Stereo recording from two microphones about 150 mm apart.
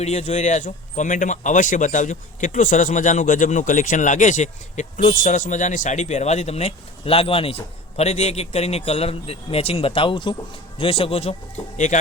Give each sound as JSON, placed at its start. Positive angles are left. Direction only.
{"t": 0.0, "sound": "speech", "side_deg": 50}